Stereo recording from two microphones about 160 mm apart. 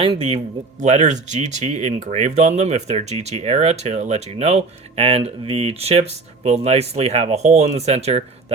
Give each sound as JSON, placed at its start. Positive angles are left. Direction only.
{"t": 0.0, "sound": "speech", "side_deg": -35}